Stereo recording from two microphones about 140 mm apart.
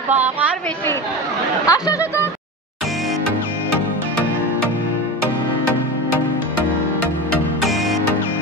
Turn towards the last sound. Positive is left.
turn(degrees=0)  # may be behind; listen again after turning